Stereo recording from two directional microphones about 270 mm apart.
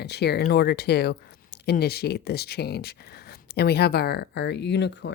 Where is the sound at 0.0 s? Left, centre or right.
Left.